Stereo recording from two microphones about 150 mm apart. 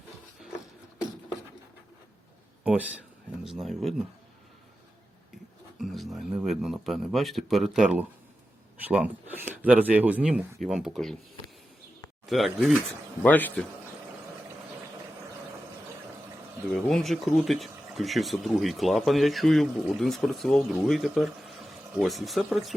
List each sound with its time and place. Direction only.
2.6 s speech: 10° right (ahead or behind)
5.8 s speech: centre (ahead or behind)
12.2 s speech: centre (ahead or behind)
13.2 s a man's voice: 10° left (ahead or behind)
16.7 s speech: centre (ahead or behind)